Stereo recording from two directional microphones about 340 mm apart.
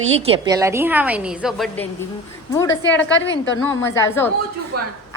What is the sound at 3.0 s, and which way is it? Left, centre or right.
Speech, left.